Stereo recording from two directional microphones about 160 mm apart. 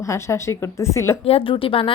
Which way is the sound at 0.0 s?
20° left (ahead or behind).